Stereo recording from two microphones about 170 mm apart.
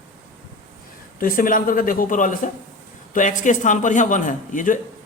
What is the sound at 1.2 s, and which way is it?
A man's voice, 55° left (ahead or behind).